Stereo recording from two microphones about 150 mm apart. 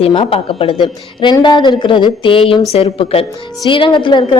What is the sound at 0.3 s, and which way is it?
A woman's voice, 35° left (ahead or behind).